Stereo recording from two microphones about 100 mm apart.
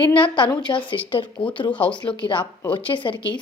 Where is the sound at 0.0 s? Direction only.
55° left (ahead or behind).